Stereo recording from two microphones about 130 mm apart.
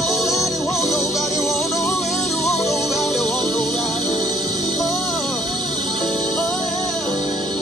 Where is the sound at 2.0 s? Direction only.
60° left (ahead or behind).